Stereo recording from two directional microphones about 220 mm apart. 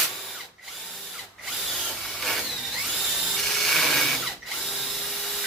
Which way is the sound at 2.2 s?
Centre (ahead or behind).